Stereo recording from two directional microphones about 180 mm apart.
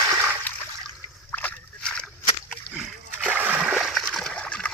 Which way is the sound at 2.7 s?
5° right (ahead or behind).